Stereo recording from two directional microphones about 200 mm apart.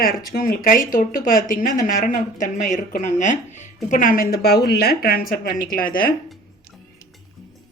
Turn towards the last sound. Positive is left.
turn(degrees=45)  # may be behind; listen again after turning